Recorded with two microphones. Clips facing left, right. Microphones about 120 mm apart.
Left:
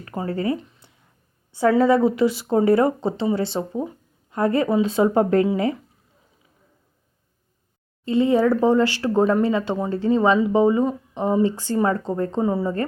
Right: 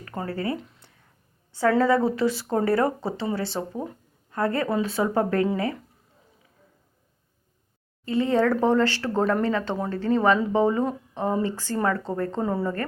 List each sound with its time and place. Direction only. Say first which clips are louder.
0.3 s a woman's voice: left 5 dB; 25° left (ahead or behind)
0.5 s speech: left 4 dB; centre (ahead or behind)
1.8 s a woman's voice: left 4 dB; 15° left (ahead or behind)
8.0 s speech: left 4 dB; 20° left (ahead or behind)
12.4 s speech: left 5 dB; 5° left (ahead or behind)